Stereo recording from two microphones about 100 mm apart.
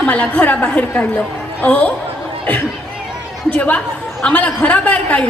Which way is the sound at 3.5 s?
15° left (ahead or behind).